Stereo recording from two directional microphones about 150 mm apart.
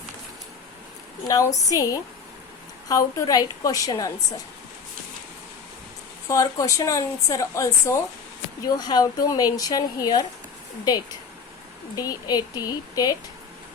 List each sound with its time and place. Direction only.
1.3 s a woman's voice: 20° left (ahead or behind)
6.2 s a woman's voice: 20° left (ahead or behind)
11.9 s a woman's voice: 25° left (ahead or behind)